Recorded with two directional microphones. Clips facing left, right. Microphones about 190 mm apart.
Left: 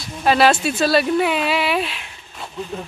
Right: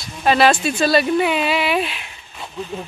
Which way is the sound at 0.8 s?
Centre (ahead or behind).